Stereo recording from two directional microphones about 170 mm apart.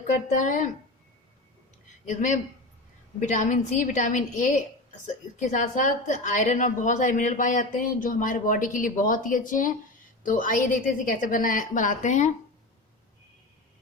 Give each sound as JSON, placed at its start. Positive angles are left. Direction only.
{"t": 0.0, "sound": "a woman's voice", "side_deg": 45}
{"t": 2.0, "sound": "a woman's voice", "side_deg": 45}